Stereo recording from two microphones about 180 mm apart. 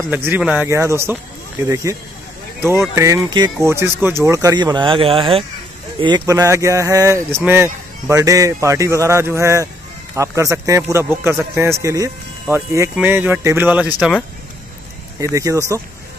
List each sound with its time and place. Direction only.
0.1 s a man's voice: 10° right (ahead or behind)
3.6 s a man's voice: 15° right (ahead or behind)
15.3 s a man's voice: 15° right (ahead or behind)